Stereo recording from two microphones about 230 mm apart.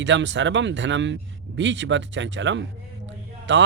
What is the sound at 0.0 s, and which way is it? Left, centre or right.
Speech, right.